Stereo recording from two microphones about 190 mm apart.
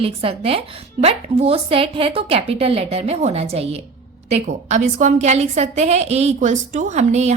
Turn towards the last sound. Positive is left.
turn(degrees=-35)  # may be behind; listen again after turning